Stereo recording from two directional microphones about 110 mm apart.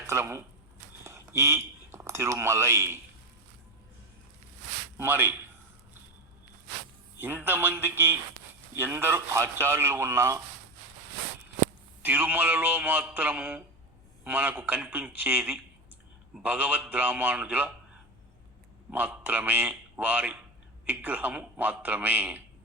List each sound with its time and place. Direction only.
0.1 s a man's voice: 20° right (ahead or behind)
4.9 s a man's voice: 20° right (ahead or behind)
7.2 s a man's voice: 20° right (ahead or behind)
12.0 s a man's voice: 15° right (ahead or behind)
18.9 s a man's voice: 15° right (ahead or behind)